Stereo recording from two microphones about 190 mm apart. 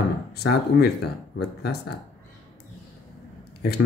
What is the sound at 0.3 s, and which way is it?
Speech, 60° left (ahead or behind).